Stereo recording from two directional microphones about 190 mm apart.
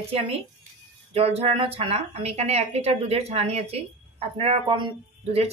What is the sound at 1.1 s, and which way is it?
A woman's voice, 30° right (ahead or behind).